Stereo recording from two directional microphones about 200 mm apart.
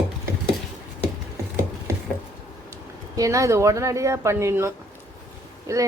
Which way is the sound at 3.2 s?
15° right (ahead or behind).